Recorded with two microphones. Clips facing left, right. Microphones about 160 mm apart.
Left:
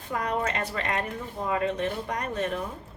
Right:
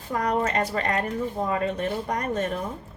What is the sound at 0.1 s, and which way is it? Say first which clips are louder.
Speech: right 4 dB; 40° right (ahead or behind).